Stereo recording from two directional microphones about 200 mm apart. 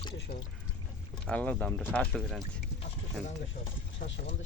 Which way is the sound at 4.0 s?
45° left (ahead or behind).